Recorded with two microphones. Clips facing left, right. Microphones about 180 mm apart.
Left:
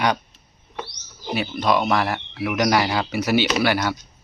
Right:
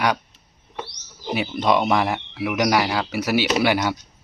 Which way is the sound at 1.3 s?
15° right (ahead or behind).